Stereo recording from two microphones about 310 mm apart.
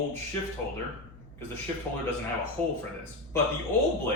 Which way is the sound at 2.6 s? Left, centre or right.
Centre.